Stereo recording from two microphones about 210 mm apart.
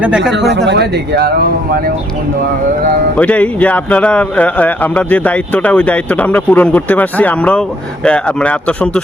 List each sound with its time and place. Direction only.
0.0 s speech: 5° right (ahead or behind)
0.5 s speech: 55° right (ahead or behind)
3.2 s a man's voice: 5° left (ahead or behind)